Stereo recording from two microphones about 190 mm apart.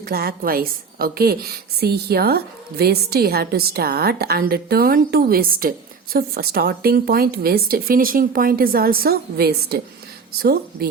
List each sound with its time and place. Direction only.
0.0 s a woman's voice: 55° right (ahead or behind)